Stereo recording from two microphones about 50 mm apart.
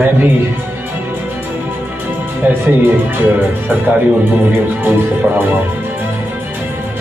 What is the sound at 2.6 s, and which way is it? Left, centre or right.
Speech, right.